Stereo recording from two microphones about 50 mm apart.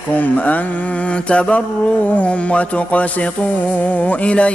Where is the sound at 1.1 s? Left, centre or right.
Left.